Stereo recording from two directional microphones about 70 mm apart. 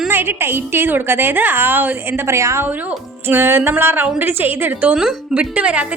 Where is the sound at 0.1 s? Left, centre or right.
Right.